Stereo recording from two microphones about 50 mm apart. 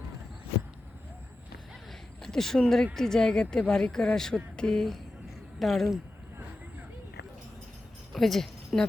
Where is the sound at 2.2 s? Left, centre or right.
Centre.